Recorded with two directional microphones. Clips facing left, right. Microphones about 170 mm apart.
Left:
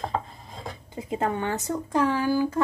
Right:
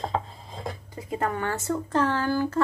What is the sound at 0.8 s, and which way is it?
Speech, 25° left (ahead or behind).